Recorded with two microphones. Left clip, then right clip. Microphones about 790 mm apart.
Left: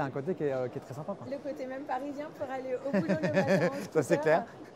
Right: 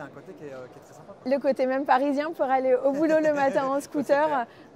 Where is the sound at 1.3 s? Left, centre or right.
Right.